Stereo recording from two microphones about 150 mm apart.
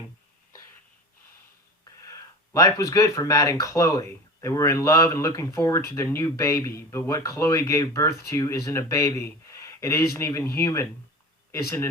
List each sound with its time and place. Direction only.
1.8 s speech: 20° left (ahead or behind)